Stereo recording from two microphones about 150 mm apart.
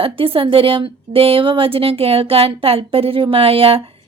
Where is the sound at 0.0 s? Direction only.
35° right (ahead or behind).